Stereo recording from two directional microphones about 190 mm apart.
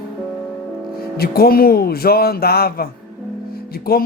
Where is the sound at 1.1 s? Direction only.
55° left (ahead or behind).